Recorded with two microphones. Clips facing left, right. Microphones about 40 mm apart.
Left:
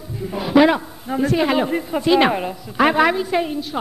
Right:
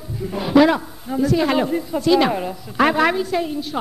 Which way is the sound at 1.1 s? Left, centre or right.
Left.